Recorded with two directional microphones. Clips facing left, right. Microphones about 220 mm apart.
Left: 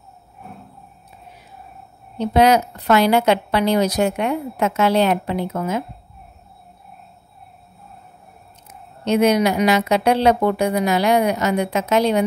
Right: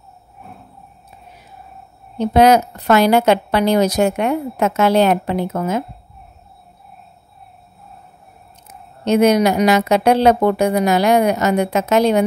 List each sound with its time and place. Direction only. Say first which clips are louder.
2.1 s a woman's voice: right 3 dB; 45° right (ahead or behind)
9.0 s a woman's voice: right 3 dB; 45° right (ahead or behind)